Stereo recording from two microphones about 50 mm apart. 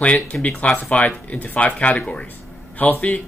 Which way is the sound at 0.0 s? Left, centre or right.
Left.